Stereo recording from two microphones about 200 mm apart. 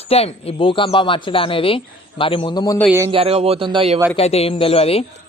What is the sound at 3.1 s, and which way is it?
Speech, 30° right (ahead or behind).